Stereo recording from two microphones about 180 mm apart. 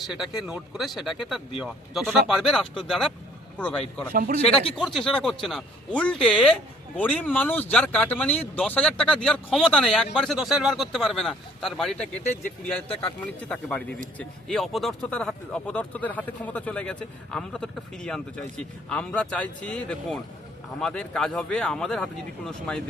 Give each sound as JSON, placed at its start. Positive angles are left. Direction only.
{"t": 0.1, "sound": "speech", "side_deg": -5}
{"t": 4.1, "sound": "speech", "side_deg": -50}
{"t": 4.8, "sound": "speech", "side_deg": 0}
{"t": 12.9, "sound": "speech", "side_deg": 30}
{"t": 13.2, "sound": "speech", "side_deg": 5}